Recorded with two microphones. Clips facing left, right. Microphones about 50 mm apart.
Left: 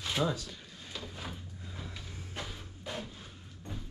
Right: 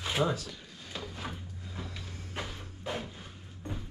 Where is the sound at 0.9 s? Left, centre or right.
Right.